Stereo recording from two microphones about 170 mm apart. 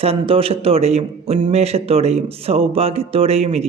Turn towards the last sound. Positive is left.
turn(degrees=-35)  # may be behind; listen again after turning